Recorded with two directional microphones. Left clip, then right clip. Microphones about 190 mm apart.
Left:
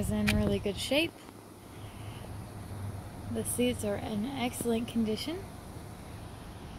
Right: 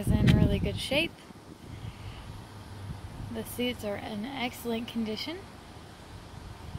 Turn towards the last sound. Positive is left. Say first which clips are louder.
# left 1 dB
turn(degrees=-5)  # may be behind; listen again after turning